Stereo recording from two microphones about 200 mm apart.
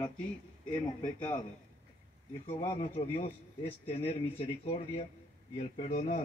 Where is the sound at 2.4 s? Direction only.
25° left (ahead or behind).